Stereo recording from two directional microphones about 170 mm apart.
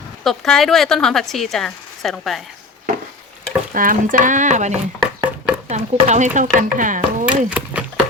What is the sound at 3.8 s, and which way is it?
Speech, 50° right (ahead or behind).